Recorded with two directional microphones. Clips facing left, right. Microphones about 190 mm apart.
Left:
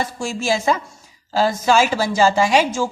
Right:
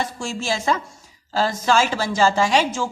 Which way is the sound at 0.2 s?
10° left (ahead or behind).